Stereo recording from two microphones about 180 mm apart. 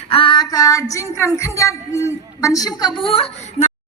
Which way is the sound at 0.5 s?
20° left (ahead or behind).